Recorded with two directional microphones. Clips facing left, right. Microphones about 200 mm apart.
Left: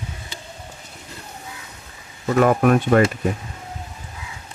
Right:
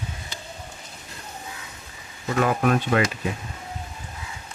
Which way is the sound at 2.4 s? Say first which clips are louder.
Left 5 dB; 50° left (ahead or behind).